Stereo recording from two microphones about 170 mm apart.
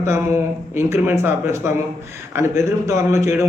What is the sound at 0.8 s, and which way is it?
A man's voice, 15° right (ahead or behind).